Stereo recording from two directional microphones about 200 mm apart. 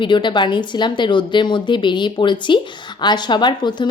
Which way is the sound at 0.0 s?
25° left (ahead or behind).